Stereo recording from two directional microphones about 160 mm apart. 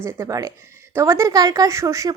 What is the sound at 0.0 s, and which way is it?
A woman's voice, 15° right (ahead or behind).